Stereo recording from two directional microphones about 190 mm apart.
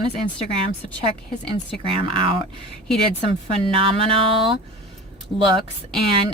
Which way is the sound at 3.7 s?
30° right (ahead or behind).